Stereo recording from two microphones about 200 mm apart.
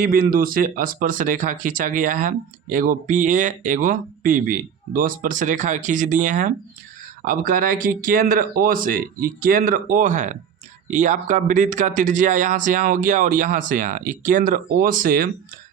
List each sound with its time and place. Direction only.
0.0 s speech: 45° right (ahead or behind)